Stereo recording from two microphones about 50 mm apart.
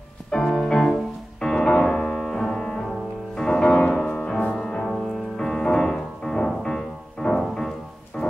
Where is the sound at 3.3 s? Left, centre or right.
Centre.